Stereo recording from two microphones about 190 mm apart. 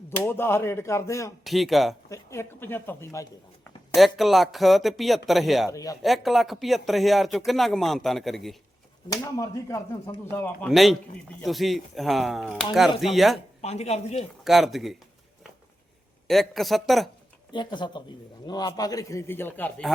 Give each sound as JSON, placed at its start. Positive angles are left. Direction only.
{"t": 0.3, "sound": "speech", "side_deg": 10}
{"t": 1.5, "sound": "speech", "side_deg": 0}
{"t": 2.0, "sound": "speech", "side_deg": 15}
{"t": 3.9, "sound": "speech", "side_deg": 0}
{"t": 5.7, "sound": "speech", "side_deg": 20}
{"t": 6.0, "sound": "speech", "side_deg": 0}
{"t": 9.4, "sound": "speech", "side_deg": 15}
{"t": 13.6, "sound": "speech", "side_deg": 35}
{"t": 14.4, "sound": "speech", "side_deg": 0}
{"t": 16.2, "sound": "speech", "side_deg": 0}
{"t": 17.5, "sound": "speech", "side_deg": 25}